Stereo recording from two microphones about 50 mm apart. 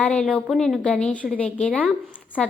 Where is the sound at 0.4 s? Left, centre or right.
Centre.